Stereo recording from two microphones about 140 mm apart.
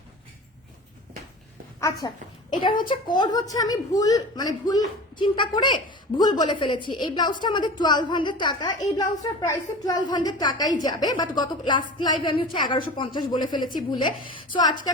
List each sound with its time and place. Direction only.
2.5 s a woman's voice: 35° left (ahead or behind)